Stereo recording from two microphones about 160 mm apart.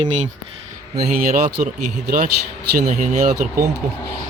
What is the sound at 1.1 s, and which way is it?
Speech, 60° right (ahead or behind).